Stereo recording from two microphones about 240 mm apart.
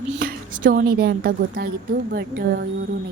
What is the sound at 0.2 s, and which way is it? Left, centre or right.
A woman's voice, right.